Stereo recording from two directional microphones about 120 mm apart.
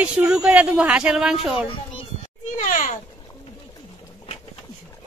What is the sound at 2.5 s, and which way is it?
Speech, 90° left.